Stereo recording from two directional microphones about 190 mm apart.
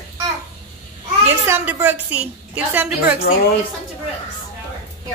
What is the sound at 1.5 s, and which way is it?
A woman's voice, 10° right (ahead or behind).